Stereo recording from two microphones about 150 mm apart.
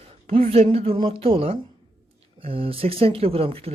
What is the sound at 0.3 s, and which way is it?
Speech, 40° right (ahead or behind).